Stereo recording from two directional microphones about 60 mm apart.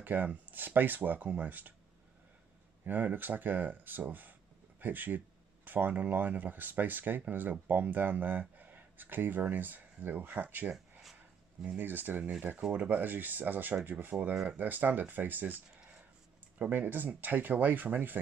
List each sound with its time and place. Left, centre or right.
0.0 s speech: right
2.8 s speech: right
10.7 s a sound: centre
11.6 s speech: right
14.3 s speech: centre
14.6 s speech: right